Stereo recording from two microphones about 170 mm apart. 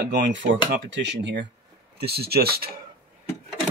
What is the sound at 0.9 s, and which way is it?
Speech, 90° right.